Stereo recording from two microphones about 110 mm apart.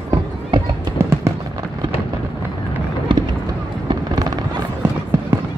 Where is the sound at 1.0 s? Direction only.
25° right (ahead or behind).